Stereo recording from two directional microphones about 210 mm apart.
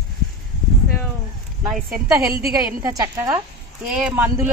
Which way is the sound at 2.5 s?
15° right (ahead or behind).